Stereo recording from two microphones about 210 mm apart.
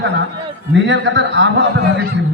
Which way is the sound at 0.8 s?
60° right (ahead or behind).